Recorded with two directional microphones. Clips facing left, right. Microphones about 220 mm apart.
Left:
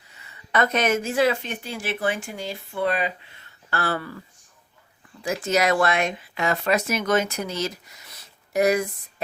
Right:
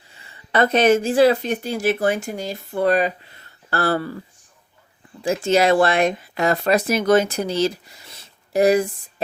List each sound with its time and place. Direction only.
0.1 s a woman's voice: 30° right (ahead or behind)
5.2 s speech: 30° right (ahead or behind)